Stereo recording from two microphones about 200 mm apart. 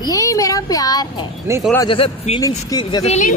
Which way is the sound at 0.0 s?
15° left (ahead or behind).